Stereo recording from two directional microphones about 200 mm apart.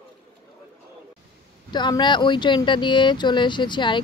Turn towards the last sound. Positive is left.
turn(degrees=25)  # may be behind; listen again after turning